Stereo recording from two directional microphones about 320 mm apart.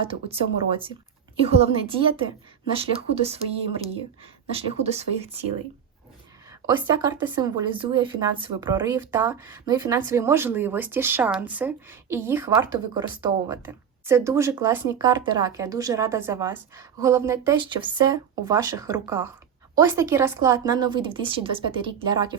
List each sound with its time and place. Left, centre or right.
0.1 s speech: centre
6.8 s speech: centre